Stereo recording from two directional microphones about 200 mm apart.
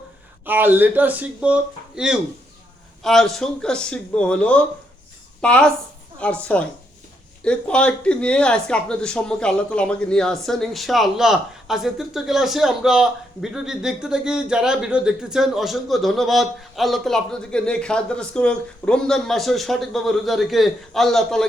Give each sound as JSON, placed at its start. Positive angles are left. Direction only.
{"t": 0.4, "sound": "a woman's voice", "side_deg": -10}